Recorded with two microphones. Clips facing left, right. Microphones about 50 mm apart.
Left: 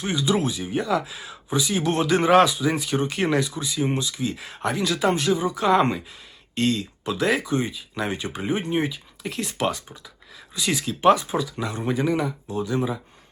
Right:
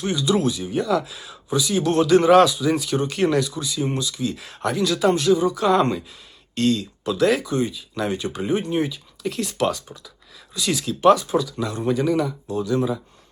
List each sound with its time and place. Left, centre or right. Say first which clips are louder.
0.0 s speech: right 2 dB; left